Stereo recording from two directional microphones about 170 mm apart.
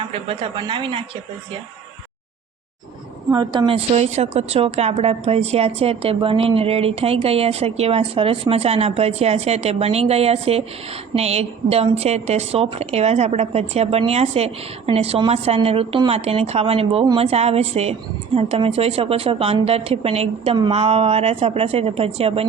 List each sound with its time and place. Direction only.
0.0 s a woman's voice: 30° right (ahead or behind)
3.3 s a woman's voice: 25° right (ahead or behind)
3.9 s a woman's voice: 40° right (ahead or behind)